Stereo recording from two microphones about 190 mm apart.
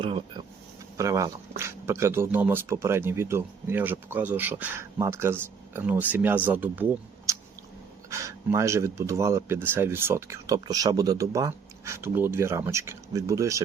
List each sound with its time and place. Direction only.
0.0 s speech: 25° right (ahead or behind)
0.9 s speech: 15° right (ahead or behind)
7.3 s chewing: 15° right (ahead or behind)
8.1 s speech: 15° right (ahead or behind)